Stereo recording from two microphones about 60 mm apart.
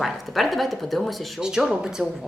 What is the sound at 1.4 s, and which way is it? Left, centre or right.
Speech, centre.